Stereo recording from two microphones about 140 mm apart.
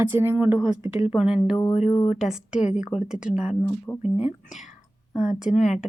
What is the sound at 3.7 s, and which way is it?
Speech, 15° left (ahead or behind).